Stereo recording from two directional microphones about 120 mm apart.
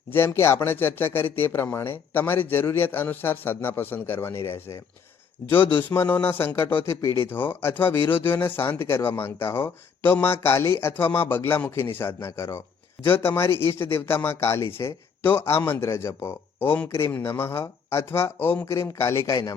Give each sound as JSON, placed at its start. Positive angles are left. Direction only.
{"t": 0.3, "sound": "speech", "side_deg": 20}
{"t": 5.9, "sound": "speech", "side_deg": 15}